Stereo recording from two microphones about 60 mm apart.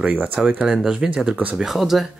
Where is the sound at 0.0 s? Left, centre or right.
Right.